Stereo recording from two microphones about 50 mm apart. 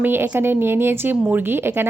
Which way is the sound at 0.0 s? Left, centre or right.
Right.